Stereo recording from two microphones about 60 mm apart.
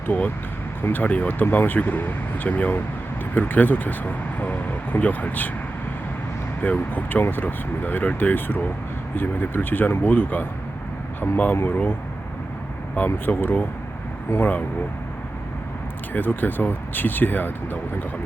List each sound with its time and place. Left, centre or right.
0.8 s speech: left
6.6 s speech: left
13.1 s speech: left
16.1 s speech: left